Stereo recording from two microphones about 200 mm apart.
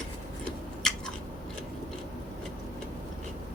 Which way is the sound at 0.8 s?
5° left (ahead or behind).